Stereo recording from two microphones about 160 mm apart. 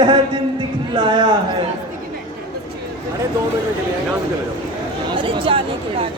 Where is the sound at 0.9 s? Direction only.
30° right (ahead or behind).